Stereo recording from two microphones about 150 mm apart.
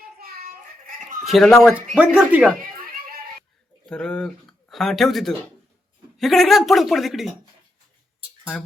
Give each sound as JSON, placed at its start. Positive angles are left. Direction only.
{"t": 0.0, "sound": "child singing", "side_deg": -90}
{"t": 1.2, "sound": "speech", "side_deg": 0}
{"t": 2.7, "sound": "a sound", "side_deg": -80}
{"t": 3.8, "sound": "speech", "side_deg": 5}